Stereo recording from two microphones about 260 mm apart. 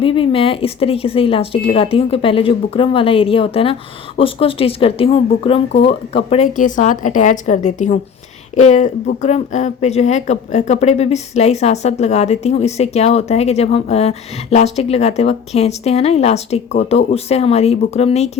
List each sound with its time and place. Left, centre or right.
0.0 s speech: centre